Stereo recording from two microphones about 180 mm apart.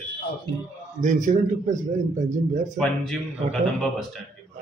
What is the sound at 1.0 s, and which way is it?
Speech, 45° right (ahead or behind).